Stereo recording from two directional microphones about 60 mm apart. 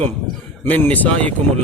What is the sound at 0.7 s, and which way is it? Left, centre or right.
Speech, left.